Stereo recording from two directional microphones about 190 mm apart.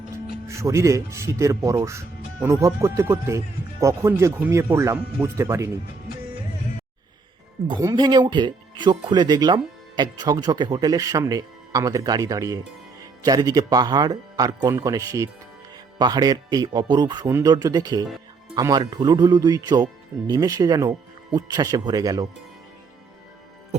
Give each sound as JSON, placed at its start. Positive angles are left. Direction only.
{"t": 0.4, "sound": "speech", "side_deg": -15}
{"t": 7.7, "sound": "speech", "side_deg": -20}